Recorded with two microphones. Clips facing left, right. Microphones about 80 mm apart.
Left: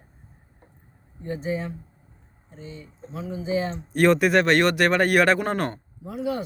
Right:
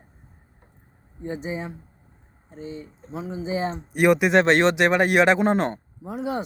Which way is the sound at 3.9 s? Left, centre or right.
Centre.